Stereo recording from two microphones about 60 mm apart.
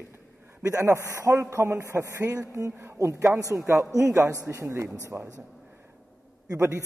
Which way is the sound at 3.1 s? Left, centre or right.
Right.